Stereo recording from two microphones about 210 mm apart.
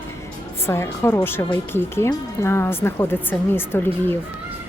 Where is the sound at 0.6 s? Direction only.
10° left (ahead or behind).